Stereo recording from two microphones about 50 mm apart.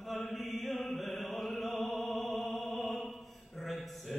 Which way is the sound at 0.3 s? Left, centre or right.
Centre.